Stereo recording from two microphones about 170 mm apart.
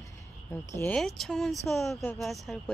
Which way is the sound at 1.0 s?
Centre (ahead or behind).